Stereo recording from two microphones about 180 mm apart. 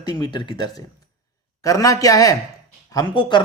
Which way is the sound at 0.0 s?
25° left (ahead or behind).